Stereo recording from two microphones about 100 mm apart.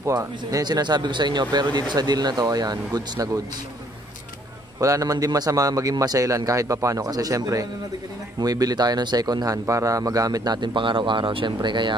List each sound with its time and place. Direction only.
0.0 s a man's voice: 30° right (ahead or behind)
4.7 s a man's voice: 35° right (ahead or behind); by 11.9 s 50° right (ahead or behind)